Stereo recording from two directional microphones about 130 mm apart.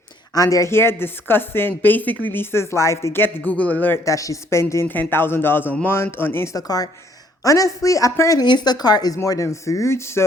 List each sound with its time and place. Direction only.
0.3 s a woman's voice: 25° left (ahead or behind)